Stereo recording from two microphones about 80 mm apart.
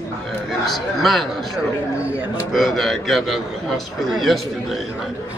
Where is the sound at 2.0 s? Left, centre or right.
Centre.